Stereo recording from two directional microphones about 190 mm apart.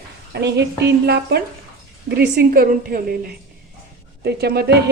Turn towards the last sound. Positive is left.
turn(degrees=-60)  # may be behind; listen again after turning